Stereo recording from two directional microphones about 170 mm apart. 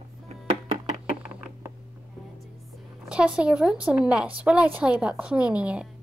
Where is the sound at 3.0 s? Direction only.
5° right (ahead or behind).